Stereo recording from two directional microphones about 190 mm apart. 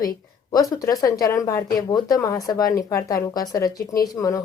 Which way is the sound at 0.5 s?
20° left (ahead or behind).